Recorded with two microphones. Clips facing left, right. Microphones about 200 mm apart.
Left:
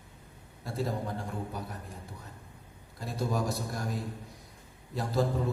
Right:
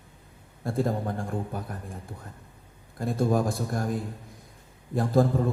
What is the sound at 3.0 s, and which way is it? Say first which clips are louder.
Speech: right 7 dB; 50° right (ahead or behind).